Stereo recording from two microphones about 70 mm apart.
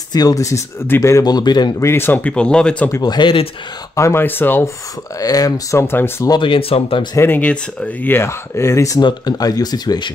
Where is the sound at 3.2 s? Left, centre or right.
Left.